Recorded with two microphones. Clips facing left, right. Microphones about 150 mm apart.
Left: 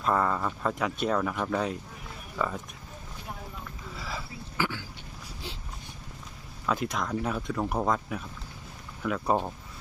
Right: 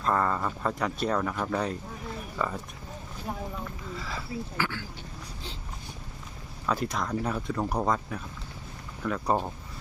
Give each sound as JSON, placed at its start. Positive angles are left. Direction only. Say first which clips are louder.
{"t": 0.0, "sound": "speech", "louder": "even", "side_deg": 5}
{"t": 4.0, "sound": "speech", "louder": "right 3 dB", "side_deg": 15}
{"t": 6.7, "sound": "speech", "louder": "even", "side_deg": 0}